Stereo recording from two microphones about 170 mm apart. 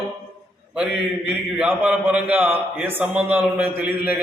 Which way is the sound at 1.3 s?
5° right (ahead or behind).